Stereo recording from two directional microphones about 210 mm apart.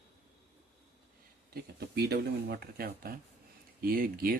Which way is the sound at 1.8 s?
50° right (ahead or behind).